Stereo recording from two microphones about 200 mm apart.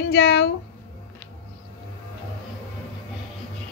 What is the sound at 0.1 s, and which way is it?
Speech, 55° left (ahead or behind).